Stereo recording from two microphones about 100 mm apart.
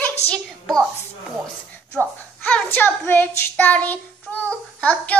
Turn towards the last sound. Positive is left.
turn(degrees=15)  # may be behind; listen again after turning